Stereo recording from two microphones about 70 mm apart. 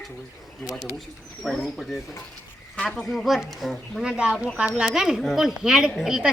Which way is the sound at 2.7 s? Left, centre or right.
Centre.